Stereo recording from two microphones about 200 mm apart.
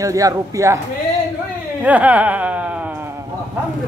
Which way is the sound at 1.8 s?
5° right (ahead or behind).